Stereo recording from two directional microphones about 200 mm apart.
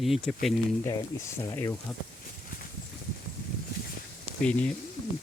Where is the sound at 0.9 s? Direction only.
15° left (ahead or behind).